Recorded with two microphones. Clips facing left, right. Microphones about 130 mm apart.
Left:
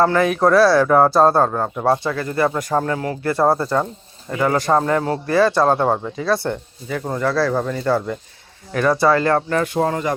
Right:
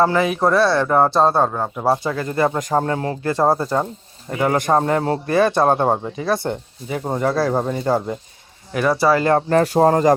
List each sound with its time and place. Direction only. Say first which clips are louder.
0.2 s speech: left 2 dB; 5° right (ahead or behind)
2.0 s speech: even; 20° right (ahead or behind)
3.2 s speech: left 1 dB; 15° right (ahead or behind)
9.1 s speech: right 1 dB; 20° right (ahead or behind)
9.5 s speech: right 5 dB; 40° right (ahead or behind)